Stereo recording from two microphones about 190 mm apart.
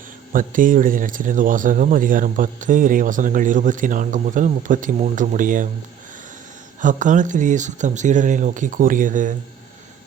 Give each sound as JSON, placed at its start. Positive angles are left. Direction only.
{"t": 0.3, "sound": "speech", "side_deg": -45}
{"t": 6.8, "sound": "speech", "side_deg": -40}